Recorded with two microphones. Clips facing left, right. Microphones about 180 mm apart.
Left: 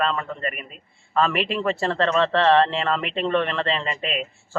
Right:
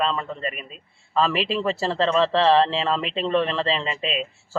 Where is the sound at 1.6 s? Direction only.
5° right (ahead or behind).